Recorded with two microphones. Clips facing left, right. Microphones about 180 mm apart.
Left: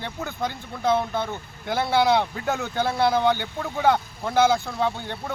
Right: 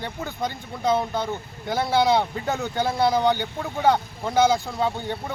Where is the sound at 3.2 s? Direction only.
15° right (ahead or behind).